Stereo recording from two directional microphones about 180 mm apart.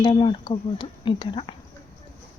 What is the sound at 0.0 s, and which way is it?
Speech, 25° left (ahead or behind).